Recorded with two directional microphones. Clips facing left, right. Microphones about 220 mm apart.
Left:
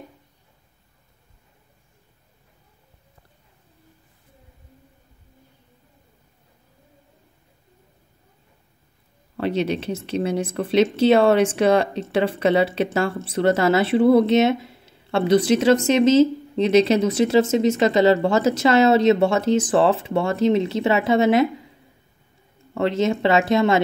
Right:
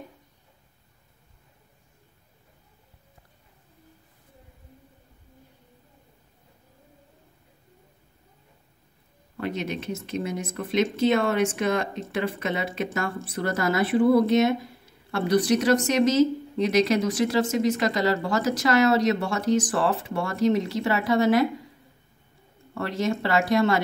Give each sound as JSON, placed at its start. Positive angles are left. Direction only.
{"t": 9.4, "sound": "speech", "side_deg": 30}
{"t": 11.1, "sound": "speech", "side_deg": 90}
{"t": 11.4, "sound": "speech", "side_deg": 30}
{"t": 22.8, "sound": "speech", "side_deg": 20}